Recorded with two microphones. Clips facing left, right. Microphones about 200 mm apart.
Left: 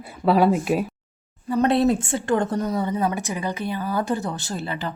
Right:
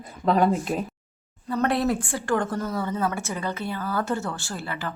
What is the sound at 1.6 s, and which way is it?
Speech, 20° left (ahead or behind).